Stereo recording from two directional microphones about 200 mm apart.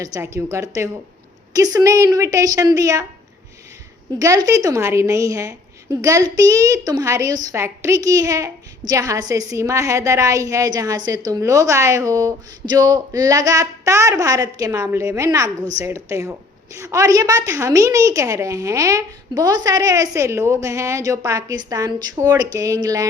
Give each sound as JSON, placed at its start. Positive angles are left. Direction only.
{"t": 0.0, "sound": "a woman's voice", "side_deg": -15}
{"t": 4.2, "sound": "a woman's voice", "side_deg": -15}